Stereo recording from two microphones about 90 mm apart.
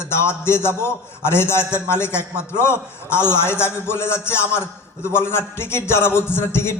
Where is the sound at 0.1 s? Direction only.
30° left (ahead or behind).